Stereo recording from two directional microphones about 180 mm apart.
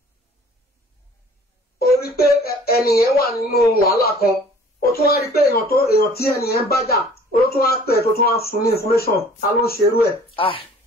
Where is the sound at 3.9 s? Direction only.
60° left (ahead or behind).